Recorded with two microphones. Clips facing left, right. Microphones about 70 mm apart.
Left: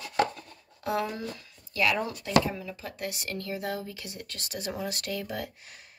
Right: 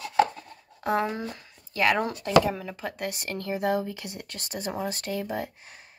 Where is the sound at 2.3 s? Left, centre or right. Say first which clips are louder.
Right 4 dB; right.